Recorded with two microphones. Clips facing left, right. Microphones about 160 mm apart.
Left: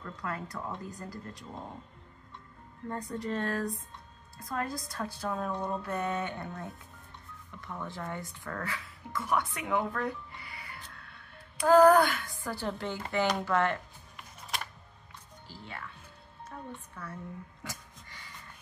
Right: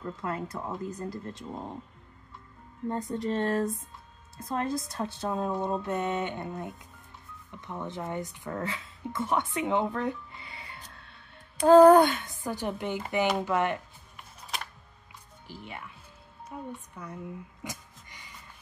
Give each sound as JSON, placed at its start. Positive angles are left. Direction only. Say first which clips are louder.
{"t": 0.0, "sound": "a woman's voice", "louder": "right 4 dB", "side_deg": -25}
{"t": 2.9, "sound": "a woman's voice", "louder": "right 4 dB", "side_deg": -20}
{"t": 14.1, "sound": "camera", "louder": "even", "side_deg": 0}
{"t": 15.4, "sound": "speech", "louder": "right 2 dB", "side_deg": -15}
{"t": 17.6, "sound": "a sound", "louder": "right 3 dB", "side_deg": -20}